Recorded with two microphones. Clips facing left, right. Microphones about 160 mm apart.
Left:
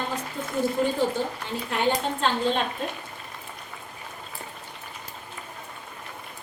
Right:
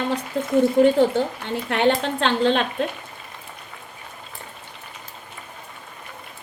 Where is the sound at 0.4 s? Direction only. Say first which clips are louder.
Right 8 dB; 90° right.